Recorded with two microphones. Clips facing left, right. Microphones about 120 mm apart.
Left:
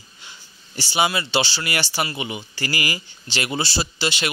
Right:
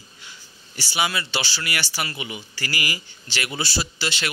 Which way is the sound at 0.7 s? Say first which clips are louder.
Left 4 dB; 25° left (ahead or behind).